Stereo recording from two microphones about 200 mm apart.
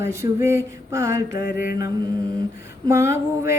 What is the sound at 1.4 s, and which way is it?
Mantra, 50° left (ahead or behind).